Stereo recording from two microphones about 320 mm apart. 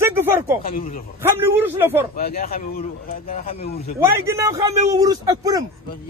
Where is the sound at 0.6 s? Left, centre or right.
Left.